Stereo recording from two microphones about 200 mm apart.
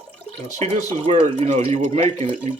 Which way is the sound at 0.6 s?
30° right (ahead or behind).